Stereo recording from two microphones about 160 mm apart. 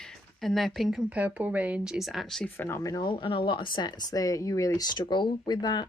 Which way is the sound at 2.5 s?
15° left (ahead or behind).